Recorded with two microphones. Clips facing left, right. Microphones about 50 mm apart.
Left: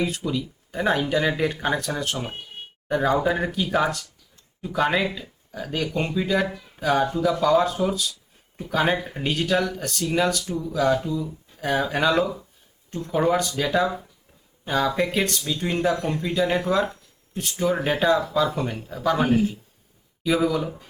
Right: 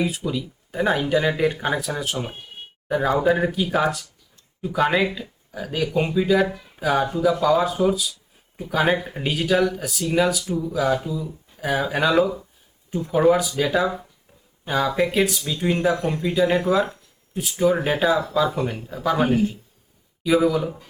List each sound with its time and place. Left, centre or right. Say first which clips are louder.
0.0 s speech: right 1 dB; centre